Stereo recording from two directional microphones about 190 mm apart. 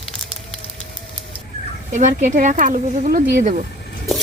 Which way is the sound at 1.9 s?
40° right (ahead or behind).